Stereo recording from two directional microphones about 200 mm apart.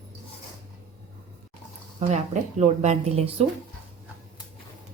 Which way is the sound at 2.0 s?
30° right (ahead or behind).